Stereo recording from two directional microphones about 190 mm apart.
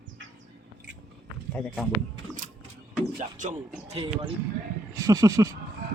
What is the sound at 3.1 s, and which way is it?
Music, 40° right (ahead or behind).